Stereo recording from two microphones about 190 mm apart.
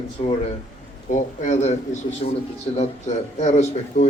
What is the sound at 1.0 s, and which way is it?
A man's voice, 40° left (ahead or behind).